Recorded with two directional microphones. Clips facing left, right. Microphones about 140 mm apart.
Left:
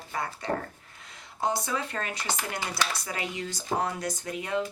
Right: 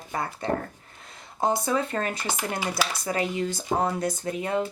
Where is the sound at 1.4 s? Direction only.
45° right (ahead or behind).